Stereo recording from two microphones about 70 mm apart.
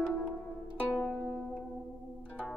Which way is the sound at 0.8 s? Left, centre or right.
Left.